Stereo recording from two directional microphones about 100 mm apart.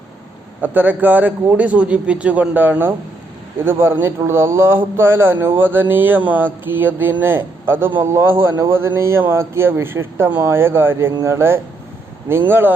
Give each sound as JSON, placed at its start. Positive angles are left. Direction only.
{"t": 0.6, "sound": "a man's voice", "side_deg": -20}